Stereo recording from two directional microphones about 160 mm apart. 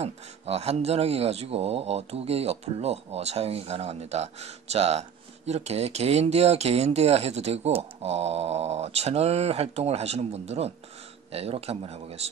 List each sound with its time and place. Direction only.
0.0 s speech: 40° right (ahead or behind)